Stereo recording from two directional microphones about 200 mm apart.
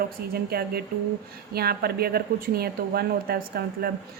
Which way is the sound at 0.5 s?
55° right (ahead or behind).